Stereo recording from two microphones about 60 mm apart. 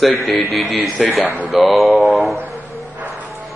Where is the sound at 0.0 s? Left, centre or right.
Centre.